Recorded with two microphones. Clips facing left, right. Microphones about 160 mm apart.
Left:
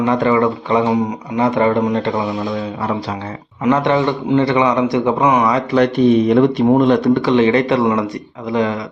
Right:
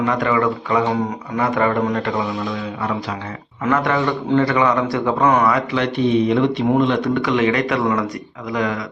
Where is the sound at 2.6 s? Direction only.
35° left (ahead or behind).